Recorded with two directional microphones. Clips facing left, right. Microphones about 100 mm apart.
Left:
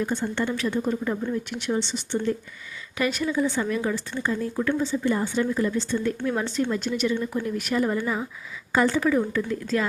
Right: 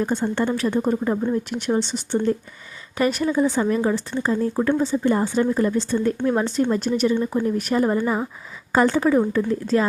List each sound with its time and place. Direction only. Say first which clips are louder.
0.0 s a woman's voice: right 4 dB; 35° right (ahead or behind)